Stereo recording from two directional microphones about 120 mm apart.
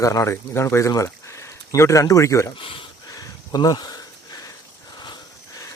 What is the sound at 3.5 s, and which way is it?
Speech, 35° left (ahead or behind).